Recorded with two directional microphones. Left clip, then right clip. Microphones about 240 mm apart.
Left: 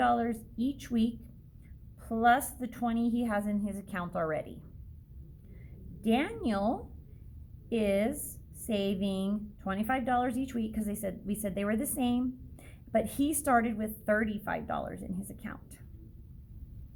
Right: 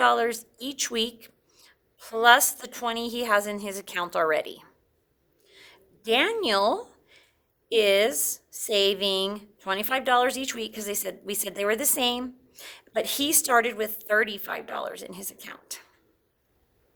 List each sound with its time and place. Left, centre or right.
0.0 s a woman's voice: right